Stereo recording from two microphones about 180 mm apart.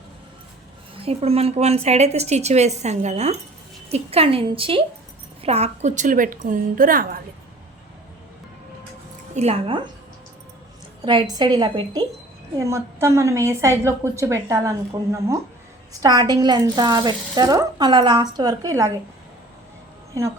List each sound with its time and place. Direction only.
0.9 s a woman's voice: 35° right (ahead or behind); by 7.2 s 55° right (ahead or behind)
9.3 s a woman's voice: 35° right (ahead or behind)
11.0 s a woman's voice: 25° right (ahead or behind)